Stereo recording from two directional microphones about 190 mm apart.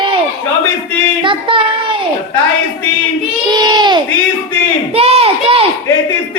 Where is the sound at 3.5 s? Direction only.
20° right (ahead or behind).